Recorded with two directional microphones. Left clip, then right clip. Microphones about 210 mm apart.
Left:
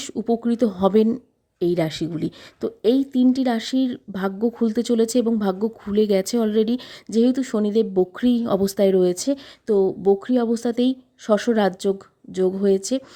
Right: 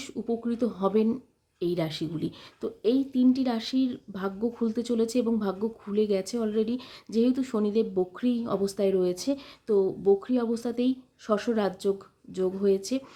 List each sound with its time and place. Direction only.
0.0 s a woman's voice: 35° left (ahead or behind)